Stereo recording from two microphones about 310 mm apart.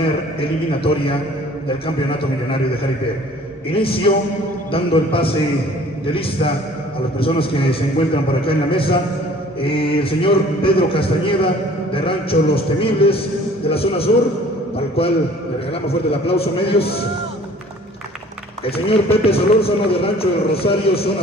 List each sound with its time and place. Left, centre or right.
0.0 s a man's voice: centre
3.7 s a man's voice: centre
14.8 s a sound: centre
15.9 s a man's voice: centre
19.2 s a man's voice: centre